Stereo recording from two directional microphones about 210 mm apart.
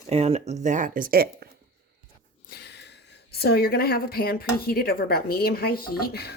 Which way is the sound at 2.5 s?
55° left (ahead or behind).